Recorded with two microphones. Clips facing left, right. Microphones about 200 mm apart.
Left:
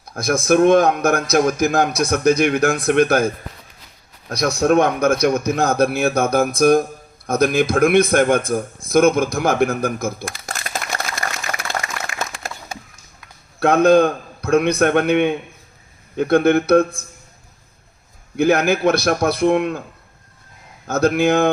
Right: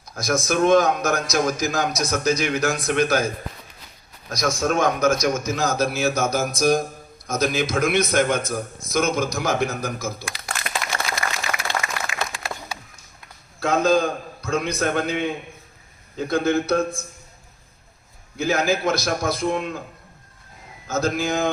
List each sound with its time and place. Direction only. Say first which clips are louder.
0.0 s a man's voice: left 3 dB; 55° left (ahead or behind)
4.3 s a man's voice: left 6 dB; 65° left (ahead or behind); by 10.6 s 45° left (ahead or behind)
10.7 s typewriter: left 1 dB; 40° left (ahead or behind)
11.7 s a sound: left 1 dB; 50° left (ahead or behind)
13.6 s a man's voice: left 6 dB; 60° left (ahead or behind)
18.3 s a man's voice: left 6 dB; 60° left (ahead or behind)
20.8 s a man's voice: left 7 dB; 60° left (ahead or behind)